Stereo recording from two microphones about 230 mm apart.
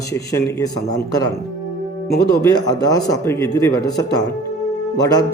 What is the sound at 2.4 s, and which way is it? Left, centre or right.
Speech, centre.